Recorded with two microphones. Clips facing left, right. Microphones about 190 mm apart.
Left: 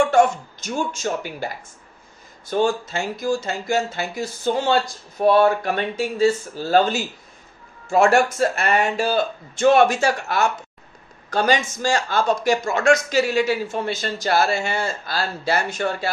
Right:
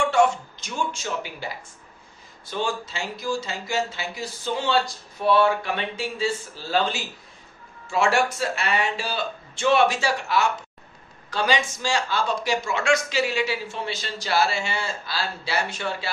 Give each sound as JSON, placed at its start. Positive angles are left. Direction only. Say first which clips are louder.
{"t": 0.1, "sound": "a man's voice", "louder": "left 3 dB", "side_deg": 45}
{"t": 2.5, "sound": "a man's voice", "louder": "left 8 dB", "side_deg": 50}